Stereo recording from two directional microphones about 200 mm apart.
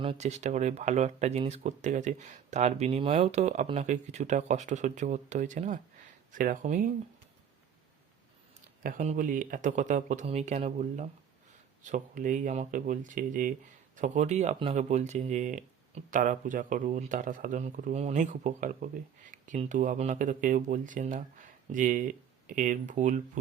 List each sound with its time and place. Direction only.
0.0 s speech: 30° right (ahead or behind)
8.8 s speech: 40° right (ahead or behind)